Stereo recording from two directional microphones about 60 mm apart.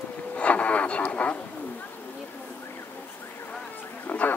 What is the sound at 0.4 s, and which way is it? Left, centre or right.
Radio, left.